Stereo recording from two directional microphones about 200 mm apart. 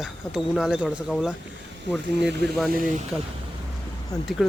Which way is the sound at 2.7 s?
45° right (ahead or behind).